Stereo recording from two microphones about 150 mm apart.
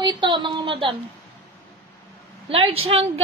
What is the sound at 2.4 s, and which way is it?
Speech, 40° right (ahead or behind).